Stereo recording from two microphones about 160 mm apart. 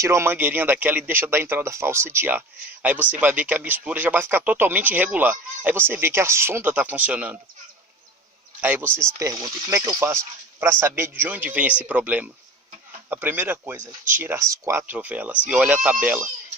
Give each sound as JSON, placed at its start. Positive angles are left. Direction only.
{"t": 0.0, "sound": "speech", "side_deg": -15}
{"t": 8.6, "sound": "speech", "side_deg": -10}